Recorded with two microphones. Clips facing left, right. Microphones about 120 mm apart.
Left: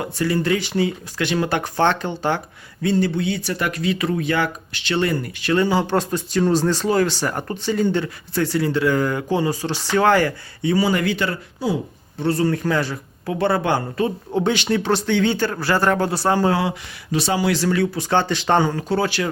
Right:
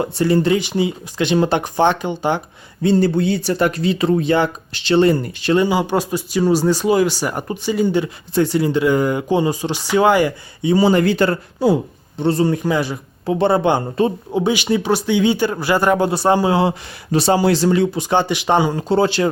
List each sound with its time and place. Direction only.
0.0 s speech: 25° right (ahead or behind)
2.8 s speech: 35° right (ahead or behind)
5.5 s speech: 10° right (ahead or behind)
10.8 s speech: 30° right (ahead or behind)
12.2 s speech: 20° right (ahead or behind)
14.3 s speech: 10° right (ahead or behind)
16.6 s speech: 40° right (ahead or behind); by 18.8 s 15° right (ahead or behind)
18.8 s speech: 25° right (ahead or behind)